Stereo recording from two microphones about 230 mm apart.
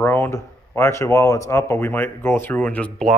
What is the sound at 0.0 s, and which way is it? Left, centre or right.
Speech, centre.